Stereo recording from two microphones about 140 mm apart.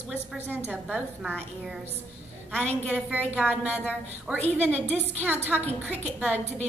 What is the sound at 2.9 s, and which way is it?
A woman's voice, 10° right (ahead or behind).